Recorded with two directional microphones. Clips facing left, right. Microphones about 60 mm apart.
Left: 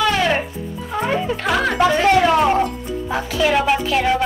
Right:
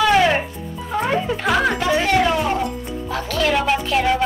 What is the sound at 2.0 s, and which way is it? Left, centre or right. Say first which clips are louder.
Music: left 5 dB; left.